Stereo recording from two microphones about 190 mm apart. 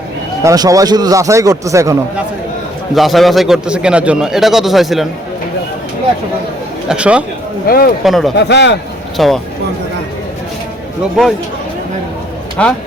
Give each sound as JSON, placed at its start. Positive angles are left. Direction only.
{"t": 0.4, "sound": "speech", "side_deg": -20}
{"t": 2.9, "sound": "a man's voice", "side_deg": 0}
{"t": 6.8, "sound": "a man's voice", "side_deg": -5}
{"t": 7.7, "sound": "speech", "side_deg": 50}
{"t": 8.0, "sound": "a man's voice", "side_deg": 0}
{"t": 8.4, "sound": "a man's voice", "side_deg": 65}
{"t": 9.1, "sound": "a man's voice", "side_deg": 0}
{"t": 12.6, "sound": "speech", "side_deg": 5}